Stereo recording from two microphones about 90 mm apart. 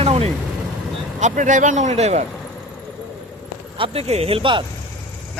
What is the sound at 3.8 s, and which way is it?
Speech, 90° right.